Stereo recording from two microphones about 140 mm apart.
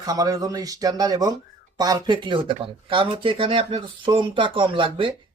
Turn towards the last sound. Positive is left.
turn(degrees=-40)  # may be behind; listen again after turning